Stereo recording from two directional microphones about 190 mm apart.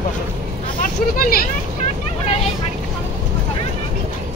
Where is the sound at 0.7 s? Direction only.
50° left (ahead or behind).